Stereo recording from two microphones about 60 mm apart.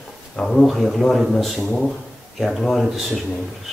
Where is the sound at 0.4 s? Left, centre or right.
Centre.